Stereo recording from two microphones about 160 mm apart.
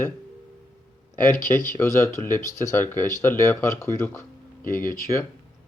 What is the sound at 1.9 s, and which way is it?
Speech, 15° left (ahead or behind).